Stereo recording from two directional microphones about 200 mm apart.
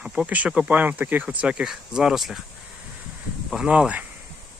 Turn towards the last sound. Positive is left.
turn(degrees=-5)  # may be behind; listen again after turning